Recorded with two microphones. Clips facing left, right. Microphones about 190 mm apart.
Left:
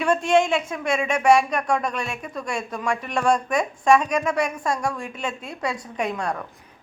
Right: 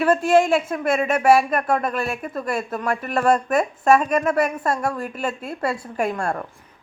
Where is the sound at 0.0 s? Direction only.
5° right (ahead or behind).